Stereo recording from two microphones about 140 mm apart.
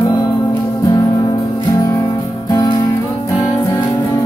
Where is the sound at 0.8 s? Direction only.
25° left (ahead or behind).